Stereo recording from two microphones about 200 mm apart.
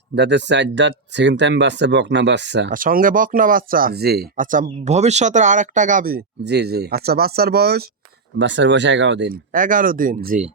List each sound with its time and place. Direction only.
0.2 s speech: 60° right (ahead or behind)
2.7 s speech: 45° right (ahead or behind)
8.4 s speech: 65° right (ahead or behind)
9.5 s speech: 40° right (ahead or behind)